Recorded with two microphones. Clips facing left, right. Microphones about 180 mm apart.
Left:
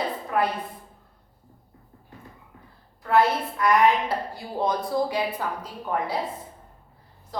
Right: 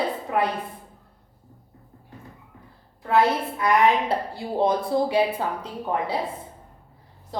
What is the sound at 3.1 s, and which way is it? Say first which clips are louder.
A woman's voice: right 1 dB; 25° right (ahead or behind).